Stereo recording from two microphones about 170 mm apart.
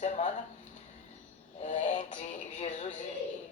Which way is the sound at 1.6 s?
45° left (ahead or behind).